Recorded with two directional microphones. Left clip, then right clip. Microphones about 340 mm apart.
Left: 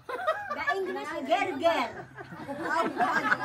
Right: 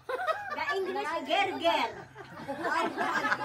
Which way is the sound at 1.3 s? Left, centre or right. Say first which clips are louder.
Left 2 dB; centre.